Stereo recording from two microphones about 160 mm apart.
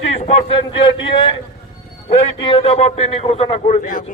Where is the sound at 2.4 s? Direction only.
35° left (ahead or behind).